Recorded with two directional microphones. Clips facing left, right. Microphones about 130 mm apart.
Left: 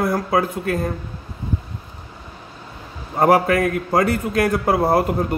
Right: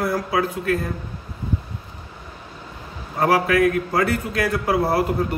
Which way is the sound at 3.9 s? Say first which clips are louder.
Left 3 dB; 45° left (ahead or behind).